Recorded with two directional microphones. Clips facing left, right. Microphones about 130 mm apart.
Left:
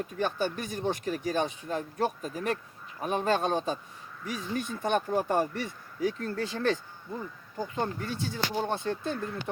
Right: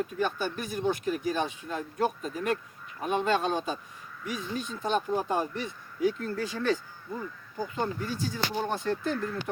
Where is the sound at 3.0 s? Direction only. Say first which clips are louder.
Even; 40° left (ahead or behind).